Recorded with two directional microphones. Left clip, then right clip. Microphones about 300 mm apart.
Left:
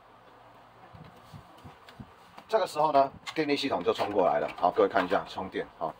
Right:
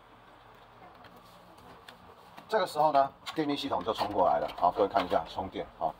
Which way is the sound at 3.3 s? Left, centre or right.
Left.